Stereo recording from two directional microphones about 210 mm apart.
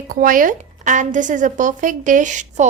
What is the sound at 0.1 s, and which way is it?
A woman's voice, 40° right (ahead or behind).